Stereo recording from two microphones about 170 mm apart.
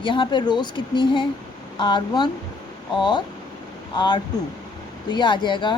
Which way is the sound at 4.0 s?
30° left (ahead or behind).